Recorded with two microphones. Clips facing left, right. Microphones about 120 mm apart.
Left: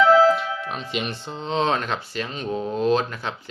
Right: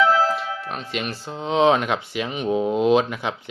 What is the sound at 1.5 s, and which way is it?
Speech, 10° right (ahead or behind).